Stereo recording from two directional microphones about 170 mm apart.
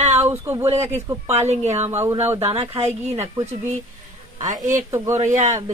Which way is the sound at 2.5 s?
35° right (ahead or behind).